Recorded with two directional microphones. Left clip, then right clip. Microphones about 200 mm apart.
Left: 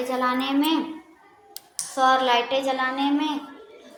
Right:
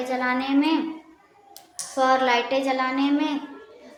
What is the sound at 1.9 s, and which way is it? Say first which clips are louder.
A woman's voice: left 1 dB; 20° right (ahead or behind).